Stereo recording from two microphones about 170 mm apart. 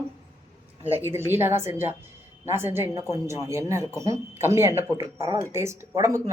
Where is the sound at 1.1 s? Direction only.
15° right (ahead or behind).